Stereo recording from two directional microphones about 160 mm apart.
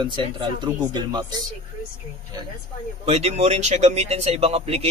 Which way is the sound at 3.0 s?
40° right (ahead or behind).